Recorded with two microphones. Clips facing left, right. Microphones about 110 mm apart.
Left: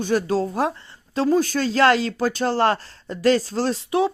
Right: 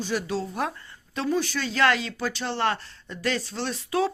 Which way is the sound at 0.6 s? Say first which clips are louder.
Left 6 dB; 30° left (ahead or behind).